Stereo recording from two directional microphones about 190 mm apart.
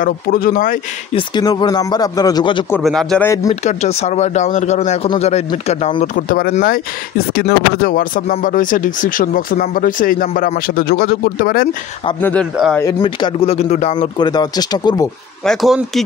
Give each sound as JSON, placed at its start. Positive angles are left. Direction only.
{"t": 0.0, "sound": "speech", "side_deg": 50}
{"t": 1.1, "sound": "speech", "side_deg": 20}
{"t": 2.8, "sound": "speech", "side_deg": 5}
{"t": 3.4, "sound": "speech", "side_deg": 35}
{"t": 12.2, "sound": "speech", "side_deg": 10}
{"t": 13.0, "sound": "speech", "side_deg": 30}
{"t": 15.4, "sound": "speech", "side_deg": 0}